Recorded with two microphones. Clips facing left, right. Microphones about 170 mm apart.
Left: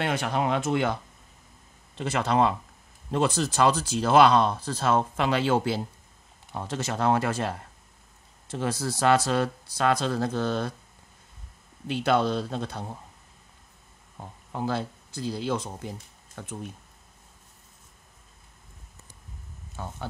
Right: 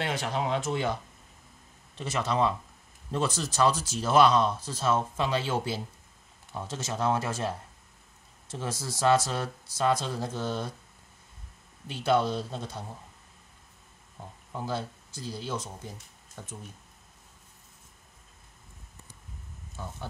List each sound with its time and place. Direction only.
0.0 s speech: 55° left (ahead or behind)
2.0 s speech: 60° left (ahead or behind)
11.9 s speech: 65° left (ahead or behind)
14.5 s speech: 65° left (ahead or behind)
19.7 s speech: 60° left (ahead or behind)